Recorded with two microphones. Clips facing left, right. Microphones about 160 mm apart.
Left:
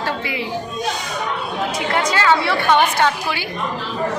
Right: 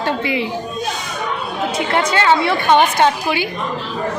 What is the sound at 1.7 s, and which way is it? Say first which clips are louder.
A woman's voice: right 3 dB; 25° right (ahead or behind).